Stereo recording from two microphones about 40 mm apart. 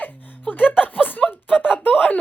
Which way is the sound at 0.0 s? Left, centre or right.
Left.